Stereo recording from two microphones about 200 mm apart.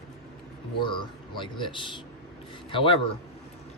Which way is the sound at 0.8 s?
25° left (ahead or behind).